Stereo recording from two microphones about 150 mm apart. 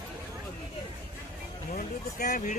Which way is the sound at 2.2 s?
55° left (ahead or behind).